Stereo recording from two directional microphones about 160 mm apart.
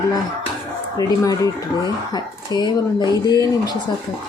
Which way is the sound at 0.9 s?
20° left (ahead or behind).